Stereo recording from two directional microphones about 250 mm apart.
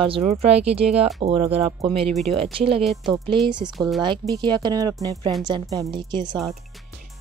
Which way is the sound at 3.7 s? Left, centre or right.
Centre.